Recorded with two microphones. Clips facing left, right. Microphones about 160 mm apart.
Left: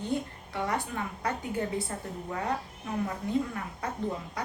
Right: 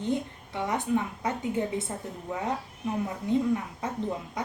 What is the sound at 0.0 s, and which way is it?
A woman's voice, 20° right (ahead or behind).